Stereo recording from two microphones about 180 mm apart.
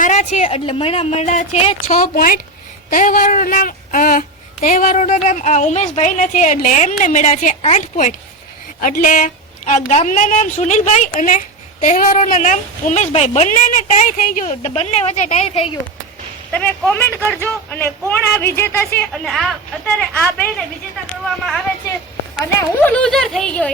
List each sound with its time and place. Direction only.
0.0 s a woman's voice: 40° left (ahead or behind)
16.5 s speech: 10° left (ahead or behind)
19.1 s speech: centre (ahead or behind)
22.4 s speech: 10° left (ahead or behind)